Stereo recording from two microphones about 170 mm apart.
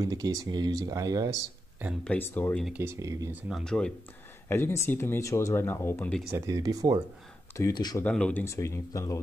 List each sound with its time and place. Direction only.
0.0 s speech: 20° right (ahead or behind)
2.0 s speech: 10° left (ahead or behind)
2.6 s speech: 10° right (ahead or behind)
3.4 s speech: centre (ahead or behind)
6.3 s speech: 20° right (ahead or behind)
7.5 s speech: 20° left (ahead or behind)
8.0 s speech: 10° left (ahead or behind)